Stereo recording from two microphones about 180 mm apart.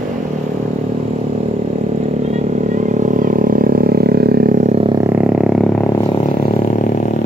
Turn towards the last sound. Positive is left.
turn(degrees=-5)  # may be behind; listen again after turning